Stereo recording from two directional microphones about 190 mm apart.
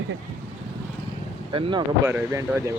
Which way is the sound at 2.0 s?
15° right (ahead or behind).